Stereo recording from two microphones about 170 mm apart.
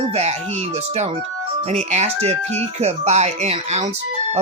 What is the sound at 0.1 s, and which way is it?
Speech, 40° right (ahead or behind).